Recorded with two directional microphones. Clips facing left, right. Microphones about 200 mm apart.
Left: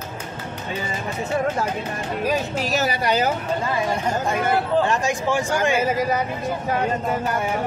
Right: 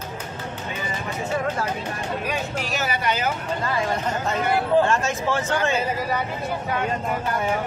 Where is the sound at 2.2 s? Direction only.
40° left (ahead or behind).